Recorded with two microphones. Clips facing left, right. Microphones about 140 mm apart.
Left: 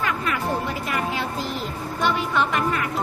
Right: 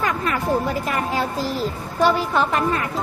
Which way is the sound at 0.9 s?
40° right (ahead or behind).